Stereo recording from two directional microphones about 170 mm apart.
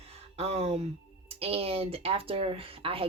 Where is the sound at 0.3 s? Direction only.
35° right (ahead or behind).